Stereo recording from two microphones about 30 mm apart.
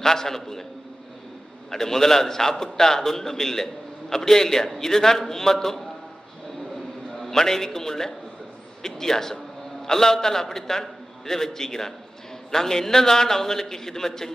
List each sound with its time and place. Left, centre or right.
0.0 s a man's voice: centre
1.7 s a man's voice: centre
7.2 s a man's voice: centre